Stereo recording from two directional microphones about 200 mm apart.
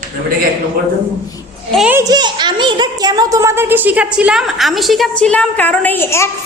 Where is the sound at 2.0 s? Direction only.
20° right (ahead or behind).